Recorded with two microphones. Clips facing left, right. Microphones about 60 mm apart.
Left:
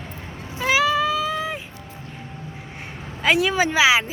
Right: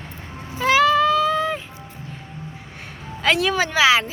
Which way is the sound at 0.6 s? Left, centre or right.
Centre.